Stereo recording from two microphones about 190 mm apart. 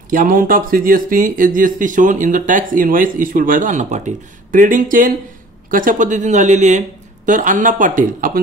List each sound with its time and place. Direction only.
0.1 s speech: 45° right (ahead or behind)